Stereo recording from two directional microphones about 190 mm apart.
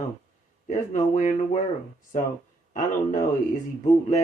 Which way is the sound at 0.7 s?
40° left (ahead or behind).